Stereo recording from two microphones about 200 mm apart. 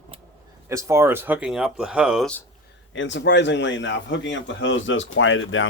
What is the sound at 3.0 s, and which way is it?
Speech, 65° left (ahead or behind).